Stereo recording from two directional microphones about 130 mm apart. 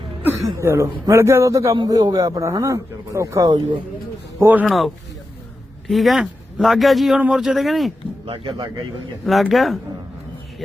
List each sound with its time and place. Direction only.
0.4 s a man's voice: 20° right (ahead or behind)
4.4 s speech: 15° right (ahead or behind)
4.6 s speech: centre (ahead or behind)
5.9 s speech: centre (ahead or behind)
8.3 s speech: 40° right (ahead or behind)
9.2 s speech: centre (ahead or behind)